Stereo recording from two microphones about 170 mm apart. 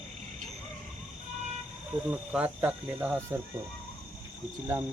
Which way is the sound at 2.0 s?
5° right (ahead or behind).